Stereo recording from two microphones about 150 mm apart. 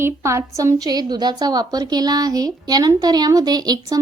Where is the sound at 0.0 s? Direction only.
20° right (ahead or behind).